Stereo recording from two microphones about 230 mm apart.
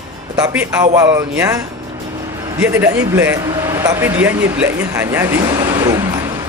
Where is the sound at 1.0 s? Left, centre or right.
Centre.